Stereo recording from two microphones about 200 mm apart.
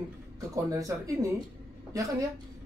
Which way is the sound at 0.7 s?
15° right (ahead or behind).